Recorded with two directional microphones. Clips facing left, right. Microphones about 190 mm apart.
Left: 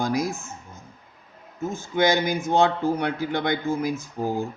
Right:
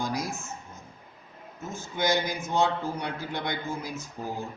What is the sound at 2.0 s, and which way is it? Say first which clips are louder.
A man's voice: left 4 dB; 75° left (ahead or behind).